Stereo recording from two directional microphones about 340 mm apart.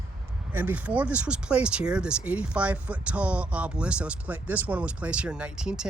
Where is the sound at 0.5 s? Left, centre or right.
Centre.